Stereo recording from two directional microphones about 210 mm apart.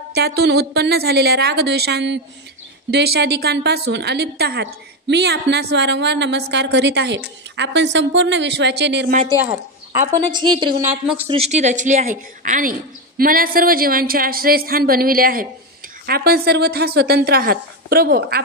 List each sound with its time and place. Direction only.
0.1 s a woman's voice: 50° right (ahead or behind)
10.3 s a woman's voice: 20° right (ahead or behind)
10.8 s speech: 5° right (ahead or behind)
11.2 s a woman's voice: 30° right (ahead or behind); by 18.4 s 45° right (ahead or behind)